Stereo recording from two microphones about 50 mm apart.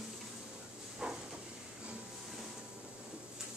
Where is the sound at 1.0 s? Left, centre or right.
Centre.